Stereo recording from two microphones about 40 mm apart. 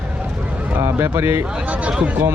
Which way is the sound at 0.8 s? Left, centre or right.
Right.